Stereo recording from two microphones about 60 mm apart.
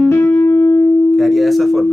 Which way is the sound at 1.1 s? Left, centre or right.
Centre.